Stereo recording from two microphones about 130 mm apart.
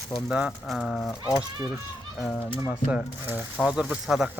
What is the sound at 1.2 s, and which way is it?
Speech, 30° left (ahead or behind).